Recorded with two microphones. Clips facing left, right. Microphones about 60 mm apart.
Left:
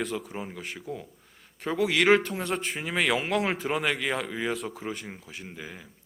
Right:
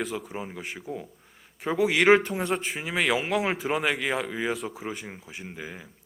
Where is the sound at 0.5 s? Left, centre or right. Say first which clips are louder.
Right 1 dB; centre.